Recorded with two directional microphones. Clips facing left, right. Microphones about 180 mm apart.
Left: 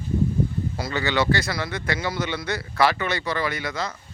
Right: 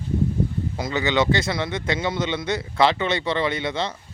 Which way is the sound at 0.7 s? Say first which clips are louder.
Right 3 dB; 20° right (ahead or behind).